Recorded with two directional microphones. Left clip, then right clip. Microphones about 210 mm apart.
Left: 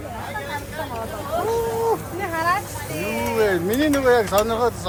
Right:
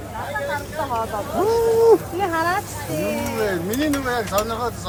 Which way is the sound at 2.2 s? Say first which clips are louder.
Right 1 dB; 50° right (ahead or behind).